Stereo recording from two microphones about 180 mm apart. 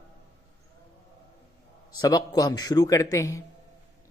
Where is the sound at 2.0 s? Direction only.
20° left (ahead or behind).